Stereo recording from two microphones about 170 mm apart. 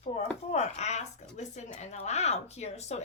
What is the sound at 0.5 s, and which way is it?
Speech, 40° left (ahead or behind).